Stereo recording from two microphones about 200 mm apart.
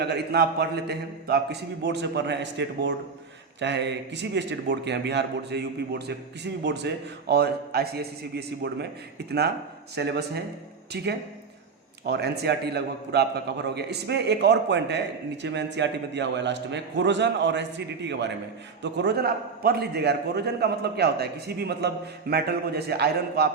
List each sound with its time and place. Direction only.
0.0 s a man's voice: 55° right (ahead or behind)